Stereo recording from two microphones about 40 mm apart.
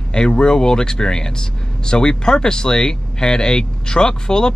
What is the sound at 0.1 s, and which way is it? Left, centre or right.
Speech, left.